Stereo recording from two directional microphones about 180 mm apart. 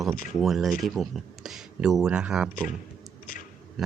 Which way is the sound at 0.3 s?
Centre (ahead or behind).